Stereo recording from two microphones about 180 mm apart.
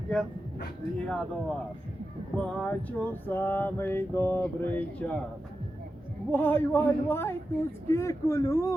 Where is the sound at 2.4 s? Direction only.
5° left (ahead or behind).